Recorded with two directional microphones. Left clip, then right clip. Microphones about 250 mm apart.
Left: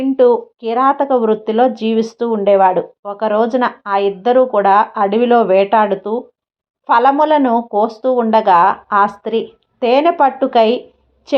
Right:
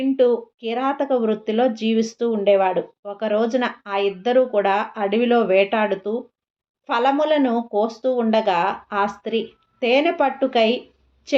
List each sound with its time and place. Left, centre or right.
0.0 s speech: centre